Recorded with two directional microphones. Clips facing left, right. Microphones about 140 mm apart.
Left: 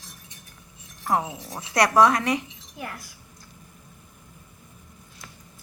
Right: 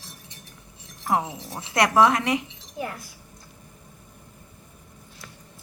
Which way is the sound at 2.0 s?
25° right (ahead or behind).